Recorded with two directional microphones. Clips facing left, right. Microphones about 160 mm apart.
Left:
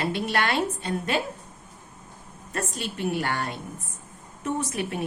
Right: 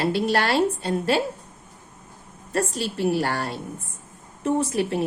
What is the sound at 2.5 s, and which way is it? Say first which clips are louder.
A woman's voice: right 6 dB; 35° right (ahead or behind).